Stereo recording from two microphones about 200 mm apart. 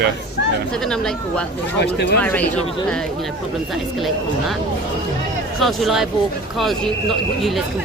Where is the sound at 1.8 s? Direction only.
60° left (ahead or behind).